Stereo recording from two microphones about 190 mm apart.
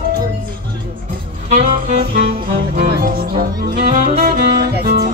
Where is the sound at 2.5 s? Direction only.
55° right (ahead or behind).